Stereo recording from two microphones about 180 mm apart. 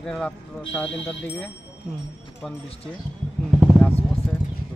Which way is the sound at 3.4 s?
10° right (ahead or behind).